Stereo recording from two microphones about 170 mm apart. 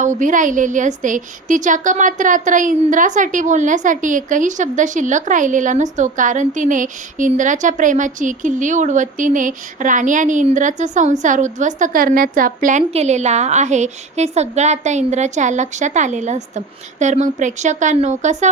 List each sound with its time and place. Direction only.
0.0 s a woman's voice: 45° right (ahead or behind)